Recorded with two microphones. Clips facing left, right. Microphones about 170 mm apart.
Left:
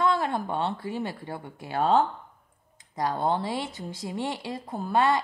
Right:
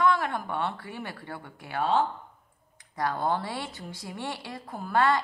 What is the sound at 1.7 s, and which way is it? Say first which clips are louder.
Speech: left 3 dB; 40° left (ahead or behind).